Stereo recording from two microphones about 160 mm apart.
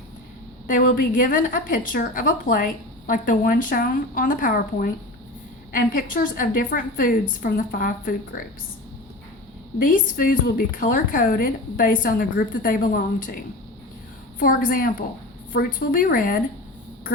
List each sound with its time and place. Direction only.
0.7 s a woman's voice: 55° left (ahead or behind)
9.7 s a woman's voice: 60° left (ahead or behind)